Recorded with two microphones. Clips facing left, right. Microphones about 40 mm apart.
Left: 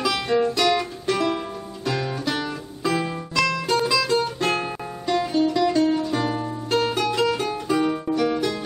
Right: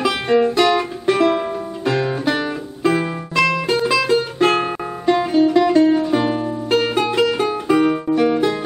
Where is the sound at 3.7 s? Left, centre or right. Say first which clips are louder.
Right 2 dB; right.